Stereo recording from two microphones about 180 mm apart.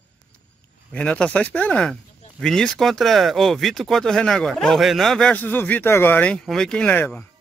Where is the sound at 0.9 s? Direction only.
5° left (ahead or behind).